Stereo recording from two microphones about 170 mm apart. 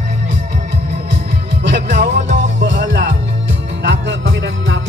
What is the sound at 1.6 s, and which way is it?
Music, 90° right.